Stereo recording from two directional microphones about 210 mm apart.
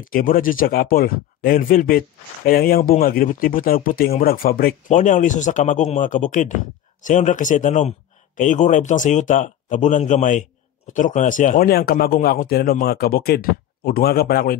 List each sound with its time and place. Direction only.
0.0 s speech: 40° left (ahead or behind)